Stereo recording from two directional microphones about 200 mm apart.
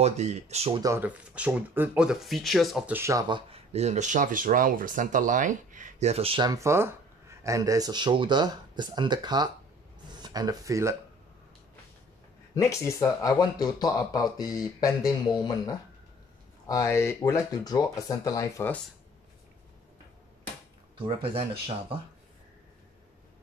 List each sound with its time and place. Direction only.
0.0 s speech: 35° right (ahead or behind)
0.8 s speech: 10° right (ahead or behind)
3.0 s speech: 15° right (ahead or behind)
12.5 s speech: 15° left (ahead or behind)
21.0 s speech: 30° right (ahead or behind)